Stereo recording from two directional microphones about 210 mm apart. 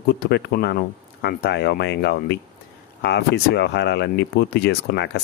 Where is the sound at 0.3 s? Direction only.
50° left (ahead or behind).